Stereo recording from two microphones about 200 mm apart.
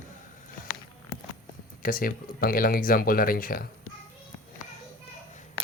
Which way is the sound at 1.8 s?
45° left (ahead or behind).